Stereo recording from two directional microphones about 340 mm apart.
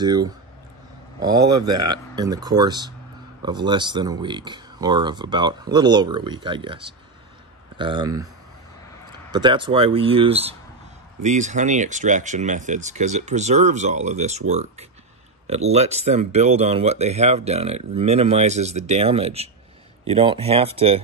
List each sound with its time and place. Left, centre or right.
0.0 s speech: centre
9.3 s speech: centre